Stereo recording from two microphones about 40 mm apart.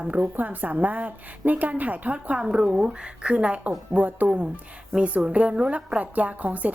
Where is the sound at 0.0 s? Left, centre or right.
Right.